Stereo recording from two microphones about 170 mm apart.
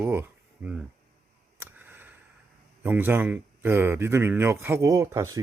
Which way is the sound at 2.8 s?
10° right (ahead or behind).